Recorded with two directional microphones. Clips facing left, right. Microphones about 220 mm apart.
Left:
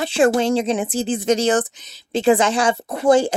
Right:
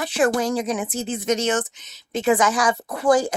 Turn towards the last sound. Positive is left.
turn(degrees=25)  # may be behind; listen again after turning